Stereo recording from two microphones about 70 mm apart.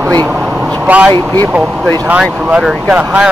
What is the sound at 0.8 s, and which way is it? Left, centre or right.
Speech, centre.